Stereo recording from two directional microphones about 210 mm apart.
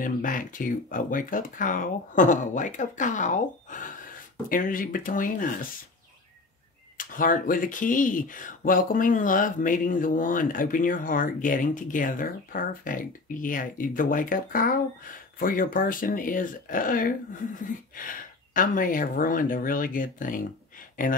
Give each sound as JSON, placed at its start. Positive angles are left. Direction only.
{"t": 0.0, "sound": "speech", "side_deg": 40}
{"t": 7.0, "sound": "speech", "side_deg": 40}